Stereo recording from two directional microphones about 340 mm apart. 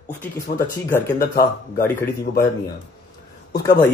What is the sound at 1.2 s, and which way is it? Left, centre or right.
Speech, left.